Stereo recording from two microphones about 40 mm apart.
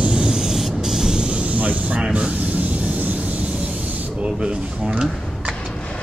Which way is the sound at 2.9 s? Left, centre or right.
Right.